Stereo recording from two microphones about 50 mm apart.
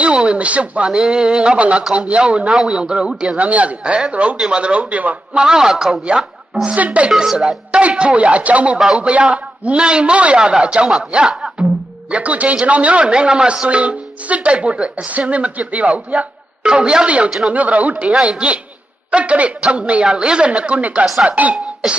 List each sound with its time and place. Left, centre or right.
0.0 s speech: right
0.9 s a sound: centre
2.0 s speech: right
2.5 s a man's voice: centre
2.8 s speech: centre
5.4 s a sound: centre
6.6 s speech: right
7.1 s speech: centre
10.9 s a sound: centre
12.1 s speech: right
18.0 s speech: centre